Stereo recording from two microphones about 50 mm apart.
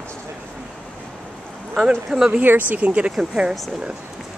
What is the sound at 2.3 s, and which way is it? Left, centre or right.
Speech, right.